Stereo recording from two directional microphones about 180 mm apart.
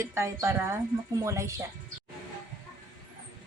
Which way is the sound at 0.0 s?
15° right (ahead or behind).